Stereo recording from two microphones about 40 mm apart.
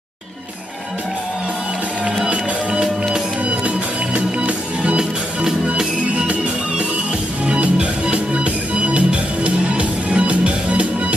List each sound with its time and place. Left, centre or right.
2.2 s music: right
7.4 s music: right